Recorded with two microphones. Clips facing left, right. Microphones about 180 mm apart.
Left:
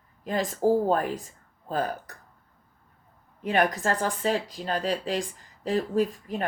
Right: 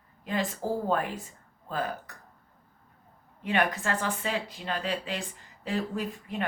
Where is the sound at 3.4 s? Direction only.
40° left (ahead or behind).